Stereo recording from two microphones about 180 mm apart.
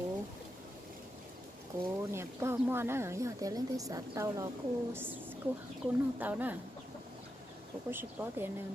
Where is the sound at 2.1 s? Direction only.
15° right (ahead or behind).